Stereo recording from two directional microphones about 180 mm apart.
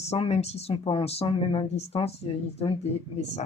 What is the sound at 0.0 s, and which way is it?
Speech, 35° left (ahead or behind).